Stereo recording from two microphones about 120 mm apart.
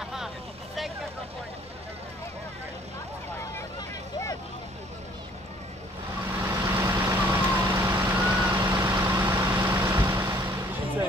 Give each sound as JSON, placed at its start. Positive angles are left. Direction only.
{"t": 0.0, "sound": "vehicle", "side_deg": -5}
{"t": 6.2, "sound": "vehicle", "side_deg": -25}